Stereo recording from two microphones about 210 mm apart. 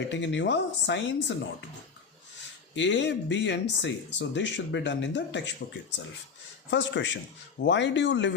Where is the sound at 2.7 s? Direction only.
60° left (ahead or behind).